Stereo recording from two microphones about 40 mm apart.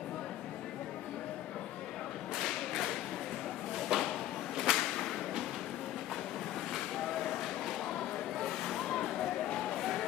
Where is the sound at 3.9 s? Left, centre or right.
Centre.